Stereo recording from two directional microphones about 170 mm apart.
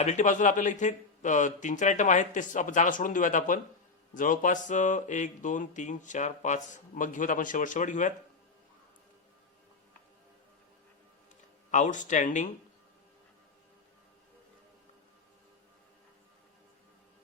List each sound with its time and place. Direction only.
0.0 s speech: 45° left (ahead or behind)
11.7 s speech: 45° left (ahead or behind)